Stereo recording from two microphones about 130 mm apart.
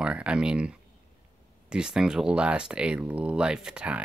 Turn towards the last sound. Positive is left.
turn(degrees=-10)  # may be behind; listen again after turning